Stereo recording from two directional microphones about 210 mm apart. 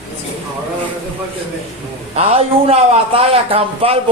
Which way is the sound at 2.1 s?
30° right (ahead or behind).